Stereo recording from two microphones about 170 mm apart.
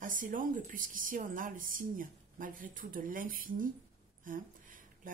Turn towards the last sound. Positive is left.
turn(degrees=-55)  # may be behind; listen again after turning